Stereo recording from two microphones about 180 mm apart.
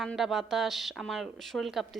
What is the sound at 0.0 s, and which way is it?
Speech, centre (ahead or behind).